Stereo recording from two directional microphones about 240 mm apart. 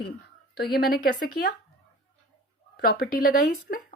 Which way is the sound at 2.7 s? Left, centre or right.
Left.